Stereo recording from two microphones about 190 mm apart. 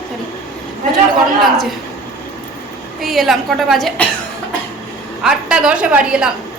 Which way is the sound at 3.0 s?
Centre (ahead or behind).